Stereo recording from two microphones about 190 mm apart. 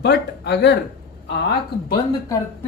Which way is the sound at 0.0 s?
60° left (ahead or behind).